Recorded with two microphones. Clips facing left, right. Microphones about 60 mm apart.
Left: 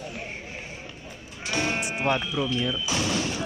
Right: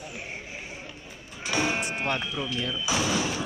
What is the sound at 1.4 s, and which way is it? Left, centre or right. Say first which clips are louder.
Music: even; centre.